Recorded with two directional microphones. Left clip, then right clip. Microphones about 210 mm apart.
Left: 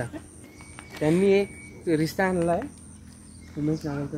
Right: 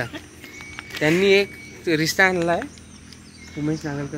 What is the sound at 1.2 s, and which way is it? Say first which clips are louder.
Speech: right 5 dB; 15° left (ahead or behind).